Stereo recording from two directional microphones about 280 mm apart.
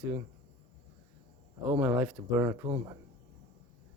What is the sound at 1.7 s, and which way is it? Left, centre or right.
Speech, centre.